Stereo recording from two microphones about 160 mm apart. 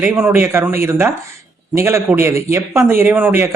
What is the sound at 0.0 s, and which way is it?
Speech, 15° right (ahead or behind).